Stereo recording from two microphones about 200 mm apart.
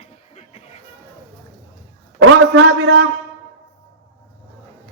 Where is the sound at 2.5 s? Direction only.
65° right (ahead or behind).